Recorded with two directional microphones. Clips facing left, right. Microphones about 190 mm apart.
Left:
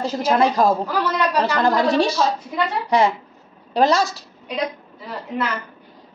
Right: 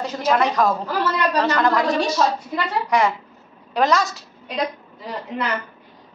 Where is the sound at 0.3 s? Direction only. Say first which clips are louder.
Left 2 dB; 30° left (ahead or behind).